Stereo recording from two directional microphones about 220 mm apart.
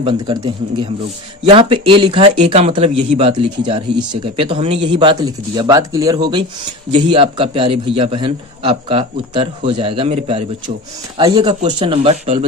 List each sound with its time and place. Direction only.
0.0 s speech: 20° right (ahead or behind)